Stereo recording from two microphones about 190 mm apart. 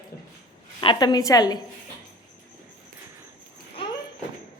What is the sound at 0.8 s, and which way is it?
Speech, 25° left (ahead or behind).